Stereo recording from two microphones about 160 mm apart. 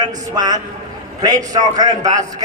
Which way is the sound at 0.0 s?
25° right (ahead or behind).